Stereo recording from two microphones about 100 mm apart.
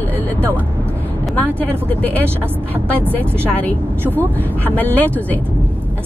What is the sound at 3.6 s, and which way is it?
Speech, 15° left (ahead or behind).